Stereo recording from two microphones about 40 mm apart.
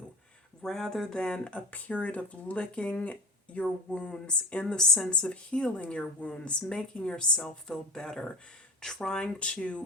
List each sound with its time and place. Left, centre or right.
0.6 s speech: centre
4.7 s speech: centre
9.4 s speech: left